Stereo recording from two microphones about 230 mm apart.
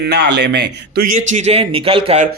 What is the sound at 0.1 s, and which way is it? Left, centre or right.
Speech, right.